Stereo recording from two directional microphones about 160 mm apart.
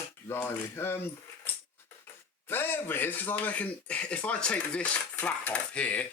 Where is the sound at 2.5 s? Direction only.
15° left (ahead or behind).